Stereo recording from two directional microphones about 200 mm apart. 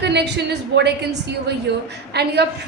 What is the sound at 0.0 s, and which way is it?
A woman's voice, 55° right (ahead or behind).